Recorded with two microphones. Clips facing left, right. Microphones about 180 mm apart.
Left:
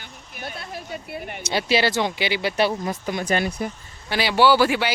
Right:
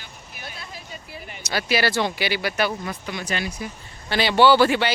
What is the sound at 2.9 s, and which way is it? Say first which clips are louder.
Speech: left 5 dB; 45° left (ahead or behind).